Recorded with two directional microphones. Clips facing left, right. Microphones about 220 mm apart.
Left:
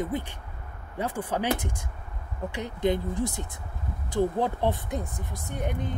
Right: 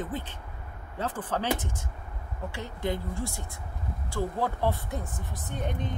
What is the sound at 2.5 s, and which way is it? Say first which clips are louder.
Speech: left 6 dB; 20° left (ahead or behind).